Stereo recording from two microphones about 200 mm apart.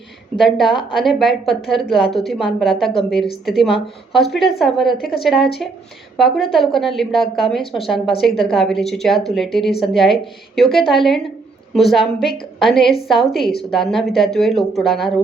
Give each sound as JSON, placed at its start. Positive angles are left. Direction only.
{"t": 0.3, "sound": "a woman's voice", "side_deg": 0}
{"t": 4.9, "sound": "a woman's voice", "side_deg": 50}
{"t": 5.2, "sound": "a woman's voice", "side_deg": 0}